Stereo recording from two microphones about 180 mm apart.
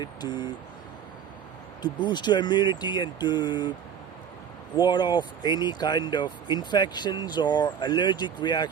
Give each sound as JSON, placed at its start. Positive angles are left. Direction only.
{"t": 0.0, "sound": "speech", "side_deg": 25}
{"t": 1.8, "sound": "speech", "side_deg": 25}
{"t": 4.8, "sound": "speech", "side_deg": 25}